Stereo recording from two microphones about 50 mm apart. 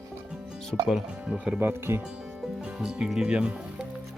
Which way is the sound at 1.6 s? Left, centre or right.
Right.